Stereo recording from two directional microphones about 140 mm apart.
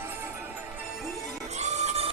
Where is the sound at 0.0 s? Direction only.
15° right (ahead or behind).